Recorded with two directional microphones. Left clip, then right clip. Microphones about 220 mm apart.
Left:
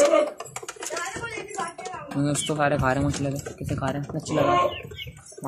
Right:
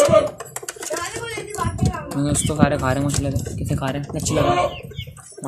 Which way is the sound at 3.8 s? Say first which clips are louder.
Right 2 dB; 15° right (ahead or behind).